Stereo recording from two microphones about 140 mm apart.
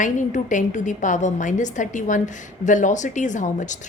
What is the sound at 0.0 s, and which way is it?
A woman's voice, 65° left (ahead or behind).